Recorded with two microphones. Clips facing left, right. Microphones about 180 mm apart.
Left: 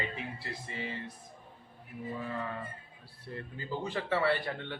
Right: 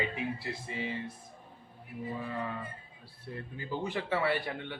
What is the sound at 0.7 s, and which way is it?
Speech, 15° right (ahead or behind).